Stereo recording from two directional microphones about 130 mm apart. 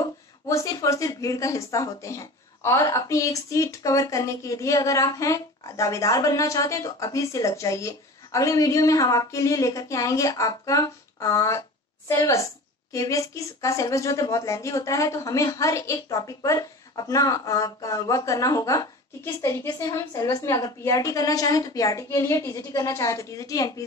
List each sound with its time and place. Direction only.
0.5 s speech: 25° left (ahead or behind)